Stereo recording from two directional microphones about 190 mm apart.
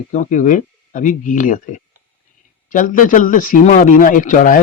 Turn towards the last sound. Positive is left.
turn(degrees=45)  # may be behind; listen again after turning